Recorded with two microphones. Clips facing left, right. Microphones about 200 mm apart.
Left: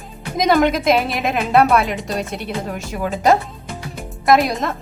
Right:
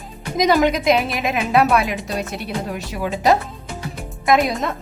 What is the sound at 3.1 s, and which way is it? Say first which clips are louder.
Music: left 1 dB; centre (ahead or behind).